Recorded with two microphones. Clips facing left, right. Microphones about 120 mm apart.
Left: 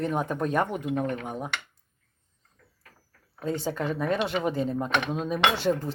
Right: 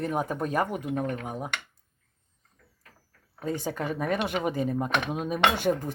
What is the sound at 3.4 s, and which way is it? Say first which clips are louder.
Speech: left 1 dB; 15° right (ahead or behind).